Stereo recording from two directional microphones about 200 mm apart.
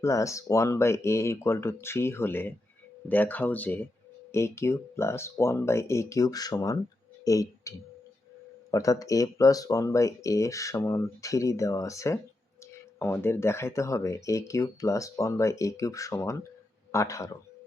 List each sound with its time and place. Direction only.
0.0 s speech: 15° left (ahead or behind)
8.7 s speech: 15° left (ahead or behind)